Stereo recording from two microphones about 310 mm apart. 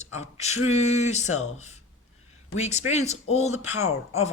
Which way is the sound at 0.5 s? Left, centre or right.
Left.